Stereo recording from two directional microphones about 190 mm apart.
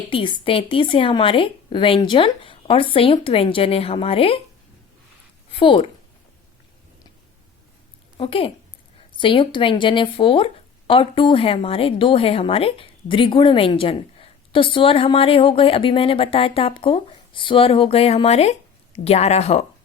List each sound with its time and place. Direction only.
0.1 s speech: 25° left (ahead or behind)
5.5 s speech: 25° left (ahead or behind)
8.2 s speech: 30° left (ahead or behind)